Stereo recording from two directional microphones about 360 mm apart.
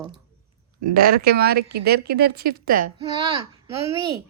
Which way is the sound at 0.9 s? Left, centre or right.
Right.